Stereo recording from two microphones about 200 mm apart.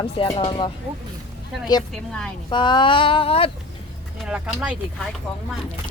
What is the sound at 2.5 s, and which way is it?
Speech, 25° left (ahead or behind).